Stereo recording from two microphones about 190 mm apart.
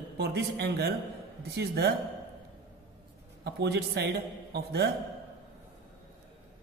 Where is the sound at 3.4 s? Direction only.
60° right (ahead or behind).